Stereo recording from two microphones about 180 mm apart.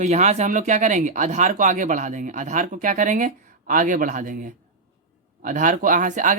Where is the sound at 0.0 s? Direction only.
40° right (ahead or behind).